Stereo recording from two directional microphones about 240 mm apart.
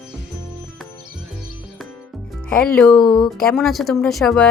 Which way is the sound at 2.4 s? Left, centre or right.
Centre.